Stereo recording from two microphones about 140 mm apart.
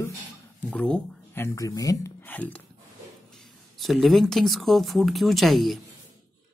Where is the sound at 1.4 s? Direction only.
25° left (ahead or behind).